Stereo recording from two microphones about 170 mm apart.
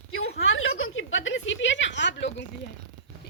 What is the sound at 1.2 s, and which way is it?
Speech, 90° left.